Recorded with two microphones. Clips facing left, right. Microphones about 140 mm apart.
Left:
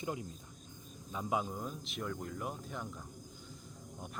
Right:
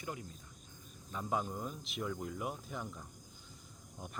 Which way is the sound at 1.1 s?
5° left (ahead or behind).